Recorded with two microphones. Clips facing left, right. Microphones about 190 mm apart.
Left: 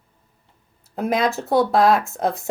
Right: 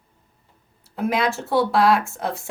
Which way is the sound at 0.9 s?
45° left (ahead or behind).